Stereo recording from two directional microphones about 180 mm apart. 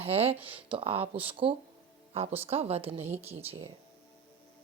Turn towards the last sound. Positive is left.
turn(degrees=-10)  # may be behind; listen again after turning